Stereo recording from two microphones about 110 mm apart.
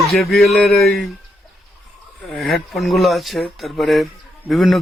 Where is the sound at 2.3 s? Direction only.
Centre (ahead or behind).